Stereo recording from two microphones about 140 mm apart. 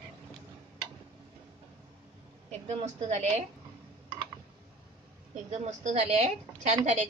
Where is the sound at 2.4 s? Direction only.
55° right (ahead or behind).